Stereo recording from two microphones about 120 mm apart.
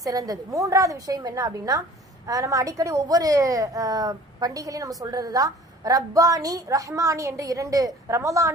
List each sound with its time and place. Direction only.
0.0 s a woman's voice: 30° right (ahead or behind)